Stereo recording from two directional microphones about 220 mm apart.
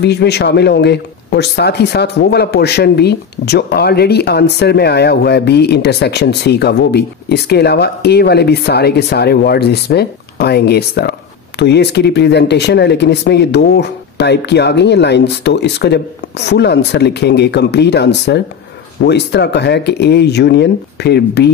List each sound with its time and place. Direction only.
0.0 s speech: 50° left (ahead or behind)